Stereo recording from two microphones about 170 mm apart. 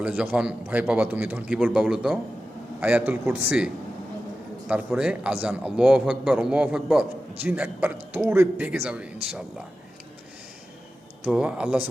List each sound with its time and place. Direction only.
0.0 s a man's voice: 10° right (ahead or behind)
4.7 s a man's voice: 5° right (ahead or behind)
11.3 s a man's voice: 5° right (ahead or behind)